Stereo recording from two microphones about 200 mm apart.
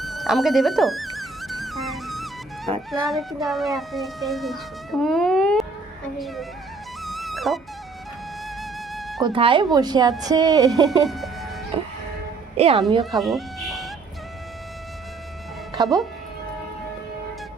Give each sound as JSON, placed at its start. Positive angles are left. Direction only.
{"t": 0.0, "sound": "music", "side_deg": 0}
{"t": 6.1, "sound": "speech", "side_deg": 0}
{"t": 7.0, "sound": "music", "side_deg": 0}
{"t": 9.0, "sound": "music", "side_deg": 0}
{"t": 9.2, "sound": "a woman's voice", "side_deg": -25}
{"t": 10.8, "sound": "speech", "side_deg": 0}
{"t": 11.7, "sound": "music", "side_deg": -25}
{"t": 12.5, "sound": "a woman's voice", "side_deg": -30}
{"t": 13.0, "sound": "cat", "side_deg": 0}
{"t": 15.7, "sound": "speech", "side_deg": -20}